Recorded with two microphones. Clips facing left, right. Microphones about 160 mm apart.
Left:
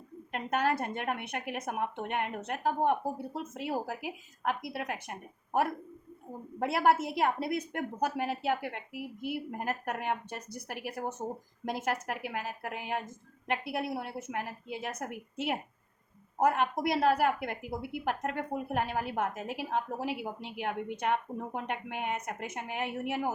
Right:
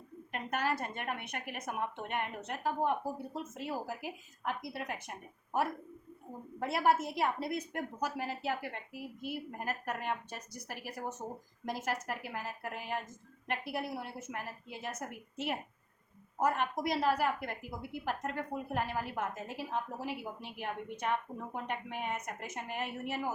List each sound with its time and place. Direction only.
0.3 s a woman's voice: 55° left (ahead or behind)
3.6 s a woman's voice: 70° left (ahead or behind)
6.6 s a woman's voice: 65° left (ahead or behind)